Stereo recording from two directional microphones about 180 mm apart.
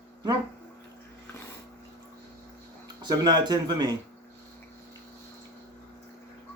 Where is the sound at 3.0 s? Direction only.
20° right (ahead or behind).